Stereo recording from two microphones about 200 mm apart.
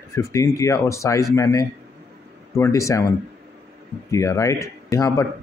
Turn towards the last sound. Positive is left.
turn(degrees=15)  # may be behind; listen again after turning